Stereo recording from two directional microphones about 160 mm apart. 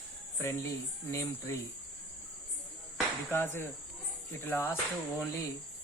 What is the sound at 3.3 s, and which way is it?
Speech, 15° left (ahead or behind).